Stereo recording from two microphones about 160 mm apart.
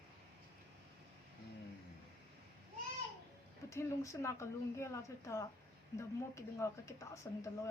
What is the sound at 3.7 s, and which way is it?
Speech, 15° left (ahead or behind).